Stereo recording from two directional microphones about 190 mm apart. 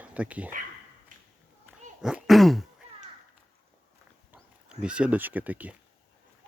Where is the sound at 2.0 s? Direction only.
5° right (ahead or behind).